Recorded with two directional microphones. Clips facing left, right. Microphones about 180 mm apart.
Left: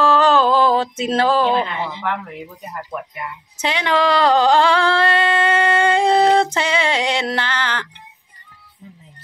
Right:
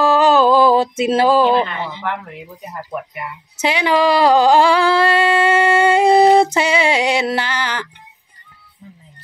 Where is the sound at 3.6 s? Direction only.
10° right (ahead or behind).